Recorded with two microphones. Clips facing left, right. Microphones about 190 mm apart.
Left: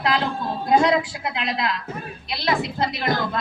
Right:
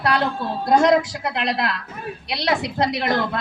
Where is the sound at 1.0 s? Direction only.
70° right (ahead or behind).